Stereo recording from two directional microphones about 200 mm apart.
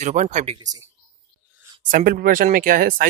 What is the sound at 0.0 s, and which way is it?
Speech, 35° right (ahead or behind).